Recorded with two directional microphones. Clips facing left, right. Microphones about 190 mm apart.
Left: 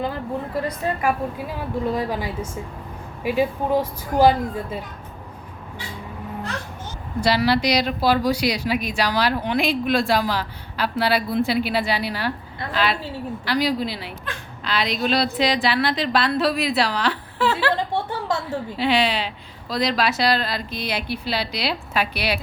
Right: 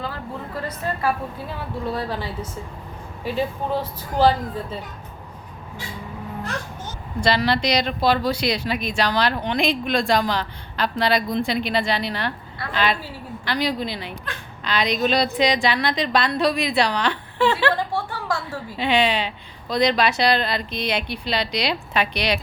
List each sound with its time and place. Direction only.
0.7 s a woman's voice: 15° left (ahead or behind)
7.2 s a woman's voice: 10° left (ahead or behind)
17.9 s a sound: 20° left (ahead or behind)
18.8 s a woman's voice: centre (ahead or behind)